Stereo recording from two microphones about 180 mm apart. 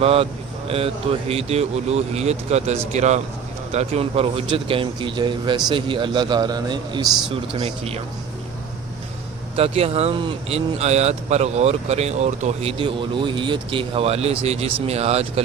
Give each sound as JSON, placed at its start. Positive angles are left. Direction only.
{"t": 0.0, "sound": "speech", "side_deg": -35}
{"t": 7.6, "sound": "speech", "side_deg": -35}
{"t": 9.6, "sound": "speech", "side_deg": -35}